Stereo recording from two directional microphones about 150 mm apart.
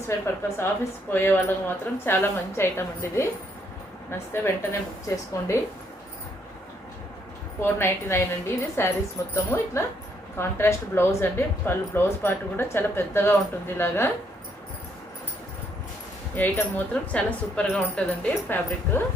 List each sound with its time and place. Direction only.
1.1 s a woman's voice: 15° left (ahead or behind)
7.6 s a woman's voice: 15° left (ahead or behind)
16.3 s a woman's voice: 10° left (ahead or behind)